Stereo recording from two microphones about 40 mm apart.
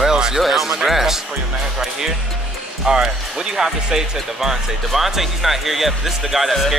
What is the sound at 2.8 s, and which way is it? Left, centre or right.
Speech, centre.